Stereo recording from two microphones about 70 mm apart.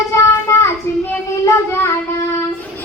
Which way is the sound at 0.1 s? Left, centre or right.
Left.